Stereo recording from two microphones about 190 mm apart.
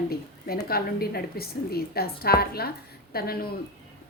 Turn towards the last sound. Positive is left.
turn(degrees=55)  # may be behind; listen again after turning